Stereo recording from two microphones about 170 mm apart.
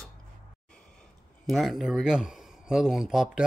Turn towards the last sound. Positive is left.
turn(degrees=-5)  # may be behind; listen again after turning